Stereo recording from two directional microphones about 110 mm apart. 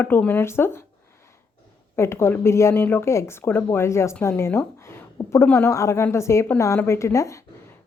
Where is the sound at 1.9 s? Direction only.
25° left (ahead or behind).